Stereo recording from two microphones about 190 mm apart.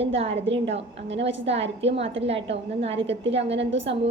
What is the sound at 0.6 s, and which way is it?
Speech, 70° right (ahead or behind).